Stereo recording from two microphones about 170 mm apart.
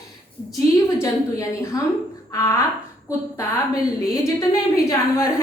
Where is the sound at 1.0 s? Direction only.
20° left (ahead or behind).